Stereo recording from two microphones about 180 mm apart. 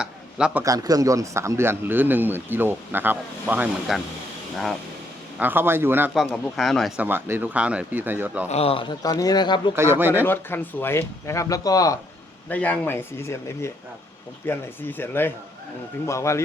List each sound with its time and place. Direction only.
0.0 s a sound: 5° right (ahead or behind)
0.6 s speech: 20° right (ahead or behind)
5.4 s speech: 10° right (ahead or behind)
6.1 s speech: 5° left (ahead or behind)
8.4 s a man's voice: 35° left (ahead or behind)
9.7 s speech: 15° right (ahead or behind)
10.2 s speech: 10° left (ahead or behind)
12.5 s speech: 10° left (ahead or behind)